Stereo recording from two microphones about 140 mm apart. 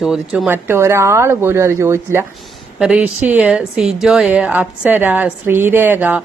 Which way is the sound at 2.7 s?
5° right (ahead or behind).